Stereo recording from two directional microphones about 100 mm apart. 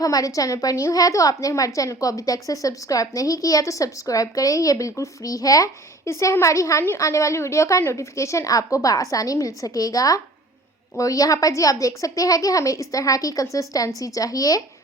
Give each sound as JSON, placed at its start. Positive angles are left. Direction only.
{"t": 0.0, "sound": "a woman's voice", "side_deg": 35}